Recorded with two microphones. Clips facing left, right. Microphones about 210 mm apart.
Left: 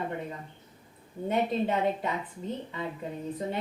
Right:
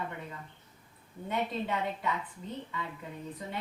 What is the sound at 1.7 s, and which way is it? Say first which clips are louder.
Speech: left 5 dB; 40° left (ahead or behind).